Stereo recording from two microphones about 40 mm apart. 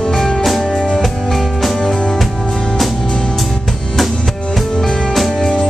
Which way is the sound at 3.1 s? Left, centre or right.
Centre.